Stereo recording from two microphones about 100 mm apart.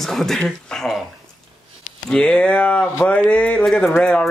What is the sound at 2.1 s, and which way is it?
Speech, 10° left (ahead or behind).